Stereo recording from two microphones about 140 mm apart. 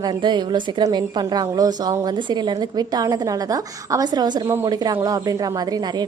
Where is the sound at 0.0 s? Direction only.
35° right (ahead or behind).